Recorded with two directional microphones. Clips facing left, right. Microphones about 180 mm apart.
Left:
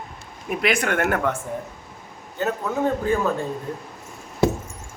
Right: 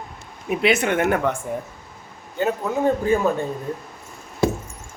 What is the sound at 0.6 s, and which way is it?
Speech, 25° right (ahead or behind).